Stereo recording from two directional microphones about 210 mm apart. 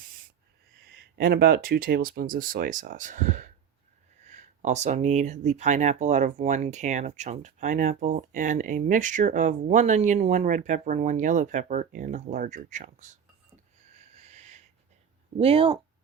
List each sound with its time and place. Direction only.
1.1 s speech: 45° right (ahead or behind)
14.2 s a sound: 30° right (ahead or behind)
15.4 s speech: 25° right (ahead or behind)